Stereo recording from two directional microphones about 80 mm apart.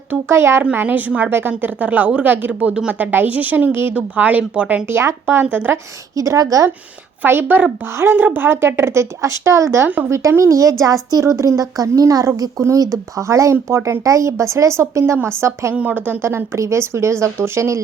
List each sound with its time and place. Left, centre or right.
0.1 s speech: right
0.6 s a woman's voice: right
4.9 s a woman's voice: right
6.1 s a woman's voice: right
7.2 s a woman's voice: right
15.7 s speech: centre; by 17.7 s right